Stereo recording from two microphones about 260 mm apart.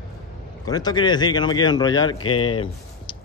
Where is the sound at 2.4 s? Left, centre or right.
Centre.